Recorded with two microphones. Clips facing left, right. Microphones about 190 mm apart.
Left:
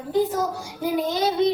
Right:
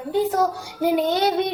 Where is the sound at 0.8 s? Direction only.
65° right (ahead or behind).